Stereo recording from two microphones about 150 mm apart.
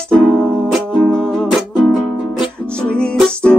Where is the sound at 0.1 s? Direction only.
5° left (ahead or behind).